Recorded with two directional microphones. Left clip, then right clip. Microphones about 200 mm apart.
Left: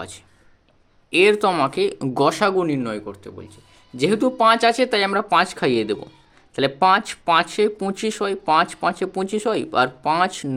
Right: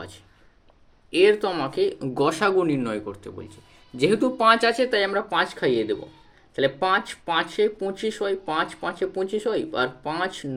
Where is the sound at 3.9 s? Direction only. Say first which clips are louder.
Left 3 dB; 25° left (ahead or behind).